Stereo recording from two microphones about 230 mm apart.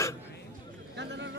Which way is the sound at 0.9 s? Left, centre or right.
Right.